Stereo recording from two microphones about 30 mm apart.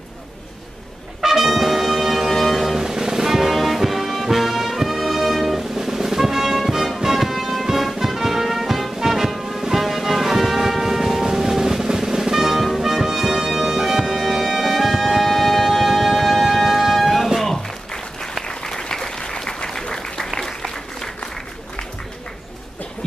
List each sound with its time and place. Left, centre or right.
1.2 s brass instrument: centre
2.8 s music: centre
3.5 s music: centre
5.8 s drum roll: centre
7.0 s music: centre
7.3 s music: centre
17.4 s applause: centre